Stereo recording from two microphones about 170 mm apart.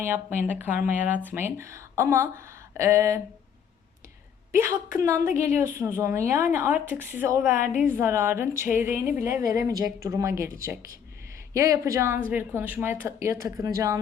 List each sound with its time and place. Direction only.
0.0 s speech: 15° right (ahead or behind)
4.5 s speech: 15° right (ahead or behind)